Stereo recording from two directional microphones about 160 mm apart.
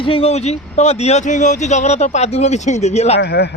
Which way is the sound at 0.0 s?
35° left (ahead or behind).